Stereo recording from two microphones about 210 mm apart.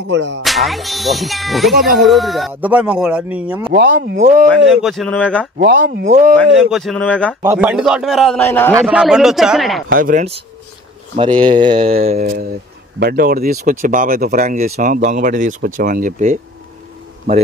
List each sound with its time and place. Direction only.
0.1 s music: 55° right (ahead or behind)
0.4 s speech: centre (ahead or behind)
3.7 s speech: 50° right (ahead or behind)
4.1 s speech: 40° right (ahead or behind)
4.6 s speech: centre (ahead or behind)
5.6 s speech: 45° right (ahead or behind)
6.3 s speech: centre (ahead or behind)
7.4 s speech: 5° right (ahead or behind)
8.8 s speech: 5° right (ahead or behind)
9.9 s speech: 40° right (ahead or behind)
11.1 s speech: 20° right (ahead or behind)
12.2 s speech: 45° right (ahead or behind)